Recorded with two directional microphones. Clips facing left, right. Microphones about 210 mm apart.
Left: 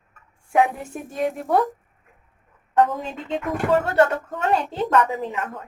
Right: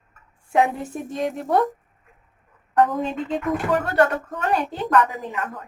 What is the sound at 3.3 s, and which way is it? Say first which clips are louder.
Speech: left 4 dB; 25° left (ahead or behind).